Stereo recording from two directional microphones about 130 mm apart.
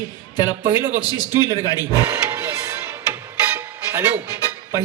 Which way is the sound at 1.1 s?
30° left (ahead or behind).